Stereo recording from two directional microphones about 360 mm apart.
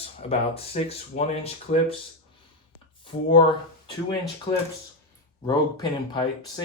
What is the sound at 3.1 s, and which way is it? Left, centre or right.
Speech, centre.